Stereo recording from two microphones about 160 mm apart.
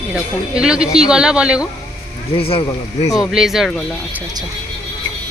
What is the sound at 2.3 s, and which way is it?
Speech, 35° left (ahead or behind).